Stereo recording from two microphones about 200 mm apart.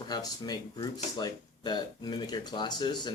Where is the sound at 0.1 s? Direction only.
20° left (ahead or behind).